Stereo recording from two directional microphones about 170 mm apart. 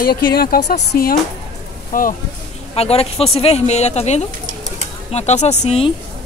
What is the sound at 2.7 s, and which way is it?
Speech, 35° left (ahead or behind).